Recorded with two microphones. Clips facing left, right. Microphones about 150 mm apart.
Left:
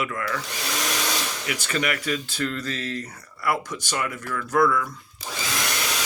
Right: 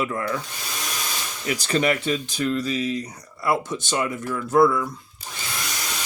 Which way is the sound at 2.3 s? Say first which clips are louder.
Right 5 dB; 10° right (ahead or behind).